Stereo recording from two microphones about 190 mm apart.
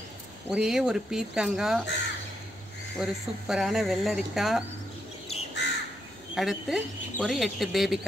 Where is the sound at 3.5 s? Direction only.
Centre (ahead or behind).